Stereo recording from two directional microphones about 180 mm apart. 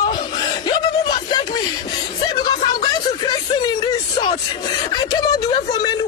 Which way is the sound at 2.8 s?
25° left (ahead or behind).